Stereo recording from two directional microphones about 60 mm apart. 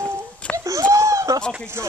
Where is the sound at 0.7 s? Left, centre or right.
Right.